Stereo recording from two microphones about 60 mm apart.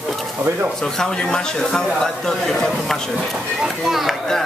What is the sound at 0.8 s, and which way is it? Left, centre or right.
Speech, centre.